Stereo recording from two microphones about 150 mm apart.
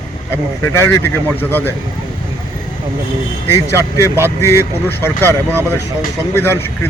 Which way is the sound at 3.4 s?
15° left (ahead or behind).